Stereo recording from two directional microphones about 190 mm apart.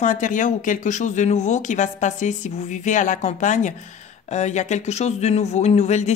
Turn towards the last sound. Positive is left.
turn(degrees=35)  # may be behind; listen again after turning